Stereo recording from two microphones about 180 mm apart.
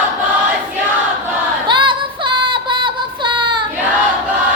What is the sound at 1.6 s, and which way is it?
Music, 25° right (ahead or behind).